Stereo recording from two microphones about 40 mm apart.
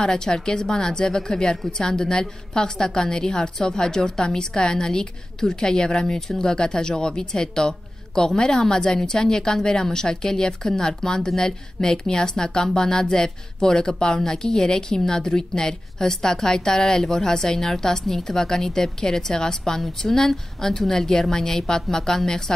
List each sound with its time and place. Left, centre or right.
0.0 s a woman's voice: centre
12.7 s a sound: left
13.0 s a woman's voice: centre